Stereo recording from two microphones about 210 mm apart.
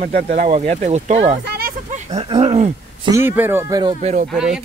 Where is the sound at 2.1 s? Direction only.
25° right (ahead or behind).